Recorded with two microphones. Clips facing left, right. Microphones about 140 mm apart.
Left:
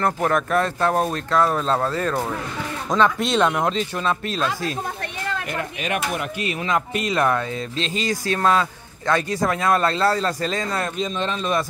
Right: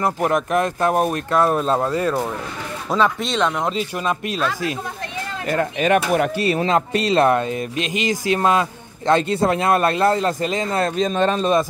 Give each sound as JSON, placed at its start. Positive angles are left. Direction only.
{"t": 0.0, "sound": "speech", "side_deg": -15}
{"t": 3.7, "sound": "speech", "side_deg": -10}
{"t": 5.5, "sound": "speech", "side_deg": -45}
{"t": 11.0, "sound": "a man's voice", "side_deg": -50}